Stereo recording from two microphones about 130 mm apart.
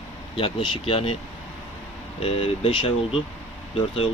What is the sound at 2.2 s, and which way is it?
Speech, 45° left (ahead or behind).